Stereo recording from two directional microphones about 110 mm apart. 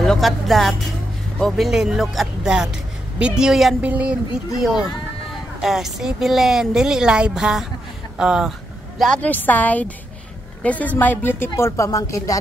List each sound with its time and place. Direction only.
0.0 s a woman's voice: centre (ahead or behind)
3.8 s a sound: 10° right (ahead or behind)
4.6 s a woman's voice: 5° right (ahead or behind)
9.2 s a woman's voice: 15° left (ahead or behind)